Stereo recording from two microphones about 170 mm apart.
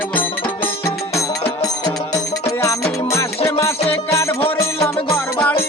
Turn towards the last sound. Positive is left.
turn(degrees=10)  # may be behind; listen again after turning